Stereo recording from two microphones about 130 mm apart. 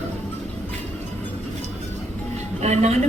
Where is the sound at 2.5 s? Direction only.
60° right (ahead or behind).